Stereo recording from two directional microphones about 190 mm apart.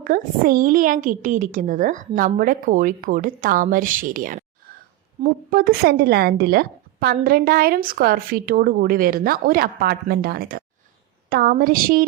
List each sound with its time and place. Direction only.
0.0 s a woman's voice: 50° right (ahead or behind)